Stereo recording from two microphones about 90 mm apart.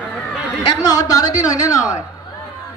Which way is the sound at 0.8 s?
40° left (ahead or behind).